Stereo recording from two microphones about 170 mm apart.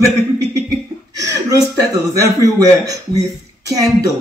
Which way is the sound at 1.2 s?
20° right (ahead or behind).